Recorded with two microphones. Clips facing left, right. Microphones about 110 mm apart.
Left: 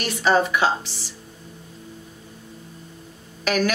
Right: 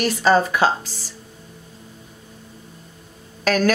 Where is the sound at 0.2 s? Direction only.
40° right (ahead or behind).